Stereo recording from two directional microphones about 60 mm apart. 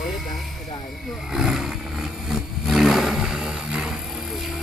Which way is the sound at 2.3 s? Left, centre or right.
Centre.